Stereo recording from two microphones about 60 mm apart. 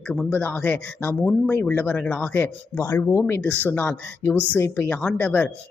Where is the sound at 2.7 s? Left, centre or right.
Left.